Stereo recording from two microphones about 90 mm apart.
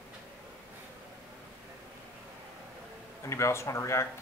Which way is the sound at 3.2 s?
30° left (ahead or behind).